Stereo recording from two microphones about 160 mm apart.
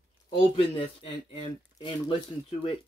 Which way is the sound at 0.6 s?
30° left (ahead or behind).